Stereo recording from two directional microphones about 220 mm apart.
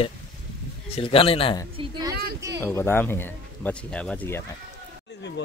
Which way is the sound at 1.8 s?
20° right (ahead or behind).